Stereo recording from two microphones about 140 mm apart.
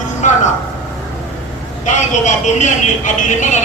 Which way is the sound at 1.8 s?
60° left (ahead or behind).